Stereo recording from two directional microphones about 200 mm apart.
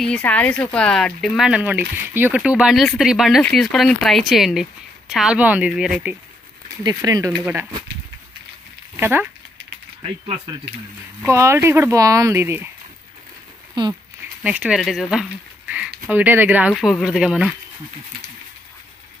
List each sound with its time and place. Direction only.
0.0 s speech: 5° left (ahead or behind)
6.8 s speech: 20° right (ahead or behind)
9.0 s speech: 10° right (ahead or behind)
10.0 s speech: 20° right (ahead or behind)
13.8 s speech: 20° right (ahead or behind)
14.4 s speech: 5° right (ahead or behind)